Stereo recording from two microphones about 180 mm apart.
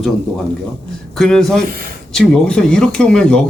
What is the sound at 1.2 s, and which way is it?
Speech, 5° left (ahead or behind).